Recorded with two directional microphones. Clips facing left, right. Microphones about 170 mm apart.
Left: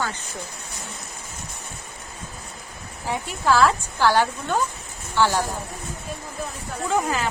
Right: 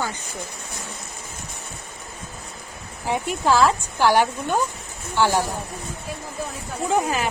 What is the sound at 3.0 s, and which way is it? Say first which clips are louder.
Speech: right 2 dB; 20° right (ahead or behind).